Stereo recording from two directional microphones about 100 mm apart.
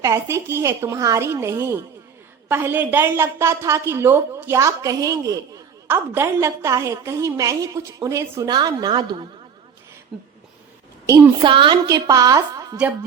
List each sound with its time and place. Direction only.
0.0 s a woman's voice: 30° right (ahead or behind)
8.4 s a woman's voice: 45° right (ahead or behind)
11.4 s a woman's voice: 55° right (ahead or behind)
11.9 s a woman's voice: 40° right (ahead or behind)